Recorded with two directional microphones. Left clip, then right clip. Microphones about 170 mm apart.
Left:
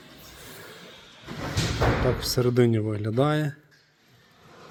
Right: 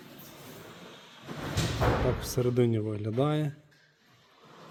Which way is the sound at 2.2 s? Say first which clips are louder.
Left 5 dB; centre (ahead or behind).